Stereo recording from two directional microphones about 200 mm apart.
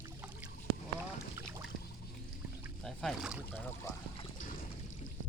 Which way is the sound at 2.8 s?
Centre (ahead or behind).